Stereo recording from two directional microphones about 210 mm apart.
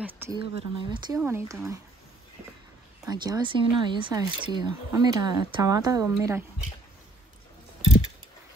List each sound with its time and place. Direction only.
0.0 s speech: 10° right (ahead or behind)
0.4 s speech: 25° right (ahead or behind)
3.1 s speech: 20° right (ahead or behind)